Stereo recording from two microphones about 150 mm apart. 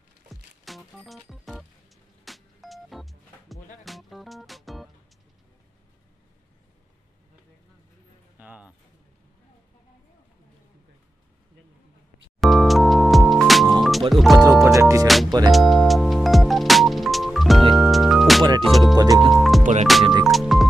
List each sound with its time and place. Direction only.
0.3 s music: centre (ahead or behind)
8.4 s a sound: 10° right (ahead or behind)
12.4 s music: centre (ahead or behind)
14.6 s music: 20° right (ahead or behind)
15.0 s music: centre (ahead or behind)
18.9 s music: 25° right (ahead or behind)
19.3 s music: centre (ahead or behind)
19.6 s music: 55° right (ahead or behind)
19.9 s music: centre (ahead or behind)